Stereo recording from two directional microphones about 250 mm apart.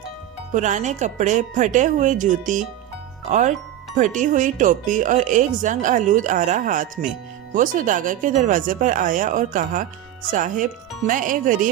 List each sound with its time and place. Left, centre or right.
0.5 s speech: right